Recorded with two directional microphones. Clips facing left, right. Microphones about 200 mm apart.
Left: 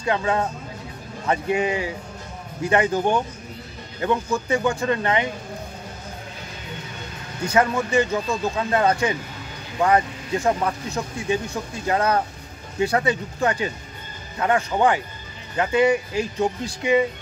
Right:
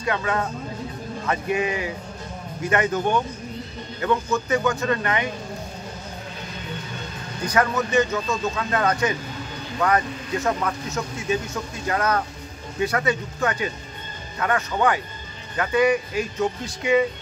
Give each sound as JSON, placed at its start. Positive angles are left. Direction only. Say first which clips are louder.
{"t": 0.0, "sound": "speech", "louder": "left 2 dB", "side_deg": 25}
{"t": 7.4, "sound": "speech", "louder": "left 2 dB", "side_deg": 25}
{"t": 11.9, "sound": "speech", "louder": "left 2 dB", "side_deg": 30}